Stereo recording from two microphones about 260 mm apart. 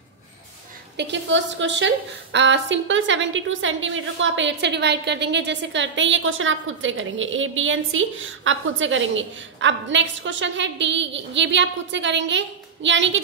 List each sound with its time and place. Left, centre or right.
0.9 s a woman's voice: right